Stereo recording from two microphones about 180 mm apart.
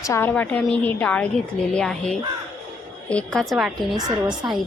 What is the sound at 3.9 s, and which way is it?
Speech, 25° right (ahead or behind).